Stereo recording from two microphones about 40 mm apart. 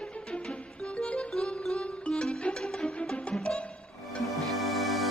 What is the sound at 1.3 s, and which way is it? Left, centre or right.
Music, centre.